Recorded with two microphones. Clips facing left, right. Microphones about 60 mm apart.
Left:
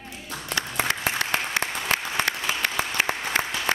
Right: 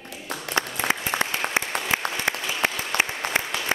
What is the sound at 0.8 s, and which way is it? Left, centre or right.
Applause, left.